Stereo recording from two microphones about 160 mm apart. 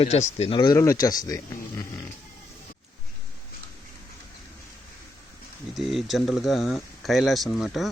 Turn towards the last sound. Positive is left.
turn(degrees=0)  # may be behind; listen again after turning